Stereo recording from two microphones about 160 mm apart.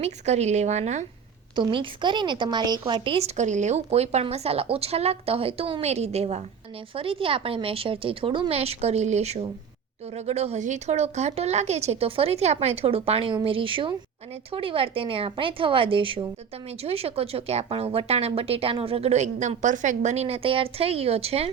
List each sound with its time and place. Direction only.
0.0 s a woman's voice: 45° right (ahead or behind)
1.5 s a woman's voice: 30° right (ahead or behind)